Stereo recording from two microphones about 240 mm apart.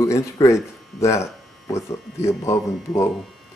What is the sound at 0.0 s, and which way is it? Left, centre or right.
Speech, centre.